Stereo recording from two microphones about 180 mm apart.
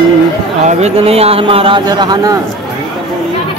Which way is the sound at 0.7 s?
35° right (ahead or behind).